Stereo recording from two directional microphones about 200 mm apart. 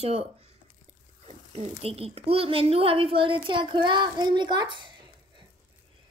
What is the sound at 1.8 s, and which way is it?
A woman's voice, 30° right (ahead or behind).